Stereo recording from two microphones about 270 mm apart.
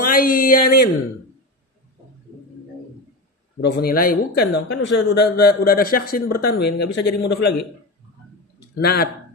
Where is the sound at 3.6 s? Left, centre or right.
Left.